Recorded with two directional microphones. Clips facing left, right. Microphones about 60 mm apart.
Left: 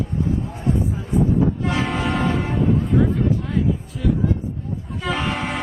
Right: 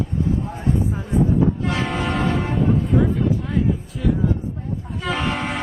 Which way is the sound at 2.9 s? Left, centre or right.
Centre.